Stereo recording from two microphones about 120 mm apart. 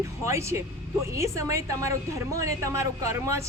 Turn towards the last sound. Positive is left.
turn(degrees=-25)  # may be behind; listen again after turning